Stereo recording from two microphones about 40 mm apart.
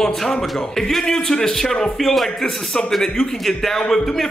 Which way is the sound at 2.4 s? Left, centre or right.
Left.